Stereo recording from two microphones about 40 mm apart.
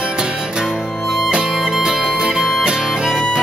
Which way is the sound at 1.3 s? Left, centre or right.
Centre.